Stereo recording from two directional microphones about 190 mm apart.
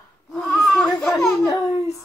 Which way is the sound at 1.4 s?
15° left (ahead or behind).